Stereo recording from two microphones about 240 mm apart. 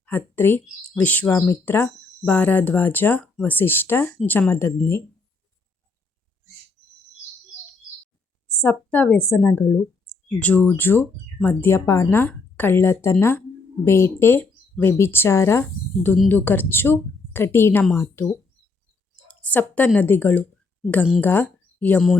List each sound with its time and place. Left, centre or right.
0.0 s speech: centre
8.4 s a woman's voice: centre
11.6 s speech: centre
19.3 s a woman's voice: centre